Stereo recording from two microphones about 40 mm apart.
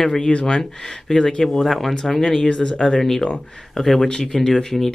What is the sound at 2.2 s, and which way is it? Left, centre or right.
Speech, centre.